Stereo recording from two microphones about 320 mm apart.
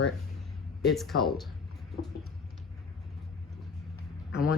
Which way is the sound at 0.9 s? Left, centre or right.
Centre.